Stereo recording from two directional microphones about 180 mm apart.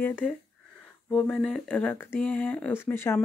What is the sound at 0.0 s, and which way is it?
Speech, 10° left (ahead or behind).